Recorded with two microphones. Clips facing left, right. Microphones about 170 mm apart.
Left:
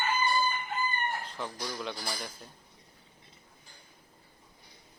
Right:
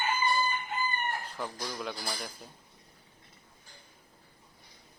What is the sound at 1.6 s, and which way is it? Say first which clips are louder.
Speech: left 1 dB; centre (ahead or behind).